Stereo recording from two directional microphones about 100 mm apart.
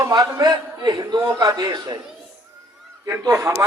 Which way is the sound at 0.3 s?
40° right (ahead or behind).